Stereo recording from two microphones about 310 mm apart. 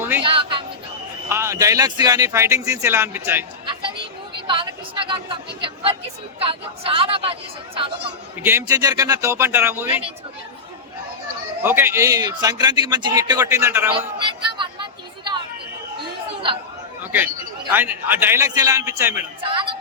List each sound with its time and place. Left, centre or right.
0.3 s a sound: centre
1.3 s speech: centre
4.4 s a sound: centre
6.4 s speech: centre
8.4 s speech: centre
11.6 s a man's voice: centre
17.0 s chatter: centre
17.7 s speech: centre